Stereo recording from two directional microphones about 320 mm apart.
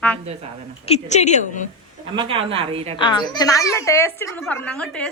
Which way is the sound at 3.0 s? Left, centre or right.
Centre.